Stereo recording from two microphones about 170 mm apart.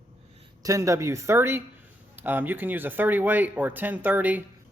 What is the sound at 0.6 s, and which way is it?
A man's voice, 20° right (ahead or behind).